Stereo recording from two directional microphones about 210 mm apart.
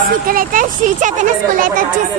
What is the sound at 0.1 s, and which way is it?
Speech, 40° right (ahead or behind).